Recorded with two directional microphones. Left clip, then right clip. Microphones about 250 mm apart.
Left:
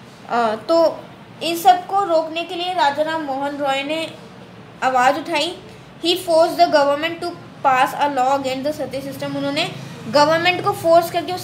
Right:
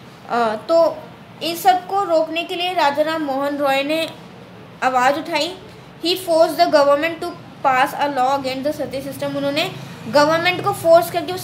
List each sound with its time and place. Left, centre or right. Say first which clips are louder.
0.3 s a woman's voice: even; centre
0.7 s a woman's voice: right 2 dB; centre
2.7 s speech: even; right
4.7 s a woman's voice: even; centre
7.7 s a woman's voice: left 1 dB; centre
10.1 s a woman's voice: even; centre